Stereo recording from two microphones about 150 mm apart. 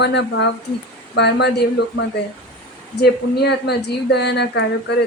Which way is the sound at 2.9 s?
90° left.